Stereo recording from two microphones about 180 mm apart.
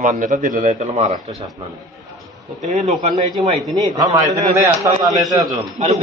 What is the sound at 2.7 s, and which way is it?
A man's voice, 35° right (ahead or behind).